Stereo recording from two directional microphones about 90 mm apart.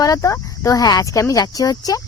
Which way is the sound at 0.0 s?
40° left (ahead or behind).